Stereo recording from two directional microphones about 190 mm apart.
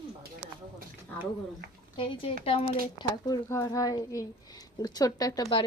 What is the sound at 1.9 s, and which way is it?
A child's voice, 25° left (ahead or behind).